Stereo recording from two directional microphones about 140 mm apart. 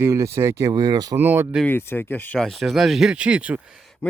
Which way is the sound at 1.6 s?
15° left (ahead or behind).